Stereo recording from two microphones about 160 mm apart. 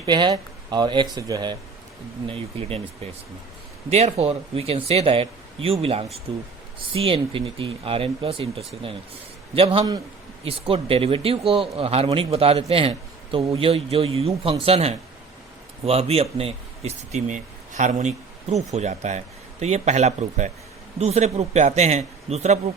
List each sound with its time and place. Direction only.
0.0 s a man's voice: 30° right (ahead or behind)
3.8 s a man's voice: 40° right (ahead or behind)
10.4 s a man's voice: 35° right (ahead or behind)